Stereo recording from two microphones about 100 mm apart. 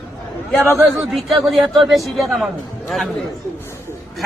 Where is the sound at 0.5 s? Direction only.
Centre (ahead or behind).